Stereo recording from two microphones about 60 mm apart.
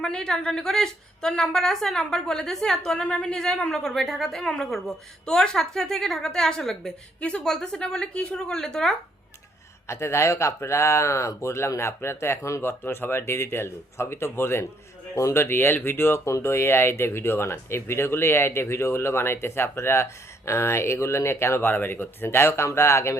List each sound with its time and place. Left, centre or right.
0.0 s a woman's voice: centre
5.2 s a woman's voice: centre
7.2 s a woman's voice: left
9.9 s speech: left
12.6 s speech: left